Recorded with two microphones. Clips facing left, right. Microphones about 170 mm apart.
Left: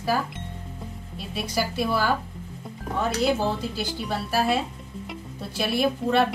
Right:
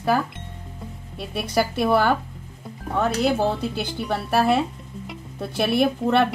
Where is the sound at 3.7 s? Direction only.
60° right (ahead or behind).